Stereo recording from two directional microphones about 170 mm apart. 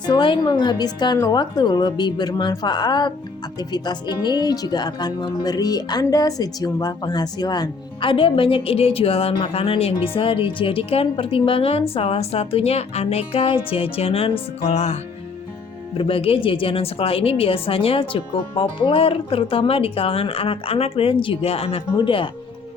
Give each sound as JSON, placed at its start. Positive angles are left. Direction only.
{"t": 0.0, "sound": "a woman's voice", "side_deg": 30}
{"t": 16.0, "sound": "a woman's voice", "side_deg": 35}